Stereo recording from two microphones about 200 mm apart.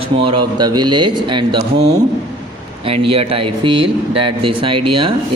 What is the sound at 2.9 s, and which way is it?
A man's voice, 30° right (ahead or behind).